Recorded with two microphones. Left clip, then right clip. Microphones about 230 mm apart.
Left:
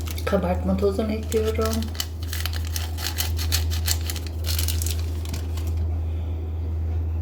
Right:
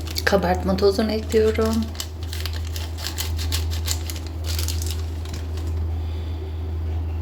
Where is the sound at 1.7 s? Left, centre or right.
Centre.